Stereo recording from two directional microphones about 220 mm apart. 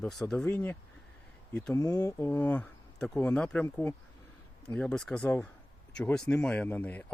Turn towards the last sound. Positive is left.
turn(degrees=5)  # may be behind; listen again after turning